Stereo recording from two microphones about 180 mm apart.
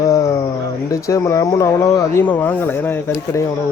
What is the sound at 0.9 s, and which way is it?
Speech, 15° left (ahead or behind).